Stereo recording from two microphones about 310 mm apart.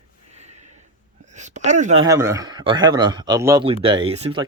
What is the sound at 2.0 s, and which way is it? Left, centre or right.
Speech, centre.